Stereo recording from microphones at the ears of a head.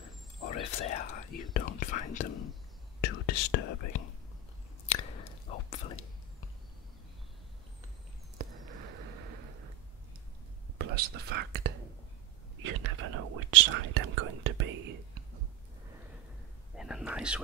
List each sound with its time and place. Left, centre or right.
0.0 s whispering: left
8.4 s a sound: right
10.8 s whispering: right
16.7 s whispering: centre